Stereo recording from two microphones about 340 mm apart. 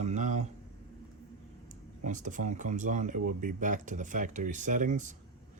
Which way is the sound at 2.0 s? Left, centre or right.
Right.